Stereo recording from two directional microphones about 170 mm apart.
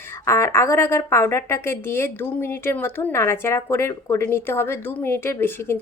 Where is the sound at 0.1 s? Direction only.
15° left (ahead or behind).